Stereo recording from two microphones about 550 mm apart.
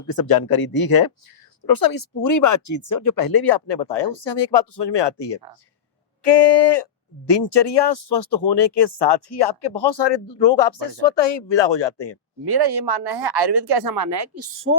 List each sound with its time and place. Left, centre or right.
0.1 s speech: left
12.5 s speech: right